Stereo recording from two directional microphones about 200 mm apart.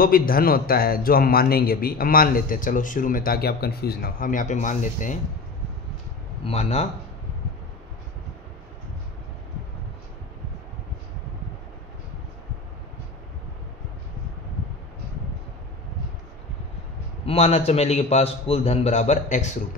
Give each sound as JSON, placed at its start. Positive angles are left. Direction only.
{"t": 0.0, "sound": "a man's voice", "side_deg": 45}
{"t": 6.4, "sound": "a man's voice", "side_deg": 30}
{"t": 17.3, "sound": "a man's voice", "side_deg": 30}